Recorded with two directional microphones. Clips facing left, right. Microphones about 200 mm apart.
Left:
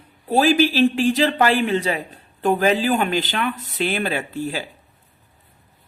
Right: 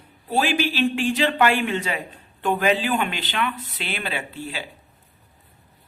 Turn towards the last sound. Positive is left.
turn(degrees=45)  # may be behind; listen again after turning